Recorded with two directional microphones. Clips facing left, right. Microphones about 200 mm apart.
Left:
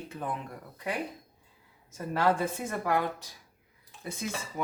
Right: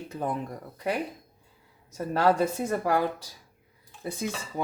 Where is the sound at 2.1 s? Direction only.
40° right (ahead or behind).